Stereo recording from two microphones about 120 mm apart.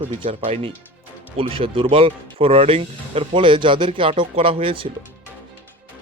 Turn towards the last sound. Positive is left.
turn(degrees=-50)  # may be behind; listen again after turning